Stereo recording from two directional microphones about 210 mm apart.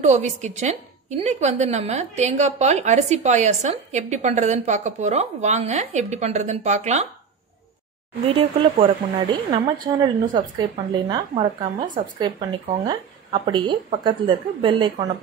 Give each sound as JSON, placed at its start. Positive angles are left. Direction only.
{"t": 0.0, "sound": "a woman's voice", "side_deg": -35}
{"t": 8.3, "sound": "speech", "side_deg": -25}